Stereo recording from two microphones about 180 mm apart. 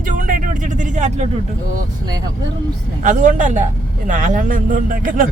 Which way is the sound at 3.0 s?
45° right (ahead or behind).